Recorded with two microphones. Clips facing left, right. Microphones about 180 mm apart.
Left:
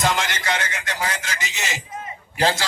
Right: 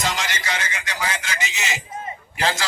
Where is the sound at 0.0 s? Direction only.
55° left (ahead or behind).